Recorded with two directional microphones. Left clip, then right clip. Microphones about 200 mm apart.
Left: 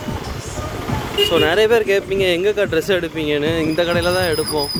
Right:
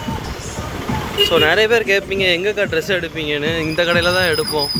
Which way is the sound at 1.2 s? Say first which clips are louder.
Right 1 dB; 15° left (ahead or behind).